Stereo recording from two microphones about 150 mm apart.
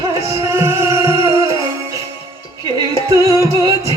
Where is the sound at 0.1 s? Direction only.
20° right (ahead or behind).